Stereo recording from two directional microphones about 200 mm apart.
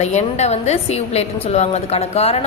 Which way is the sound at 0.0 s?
35° left (ahead or behind).